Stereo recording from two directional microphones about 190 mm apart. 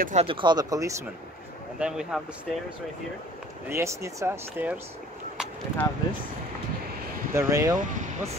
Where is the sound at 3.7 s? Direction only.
15° right (ahead or behind).